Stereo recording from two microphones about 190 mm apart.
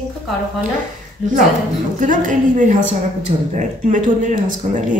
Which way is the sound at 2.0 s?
45° right (ahead or behind).